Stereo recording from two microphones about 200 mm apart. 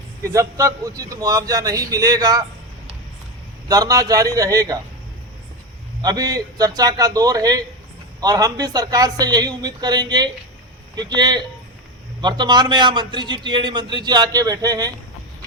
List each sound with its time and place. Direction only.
0.2 s a man's voice: 15° right (ahead or behind)
3.7 s a man's voice: 15° right (ahead or behind)
6.0 s a man's voice: 20° right (ahead or behind)